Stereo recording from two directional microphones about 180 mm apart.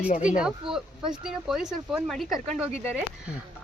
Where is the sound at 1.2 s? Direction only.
5° right (ahead or behind).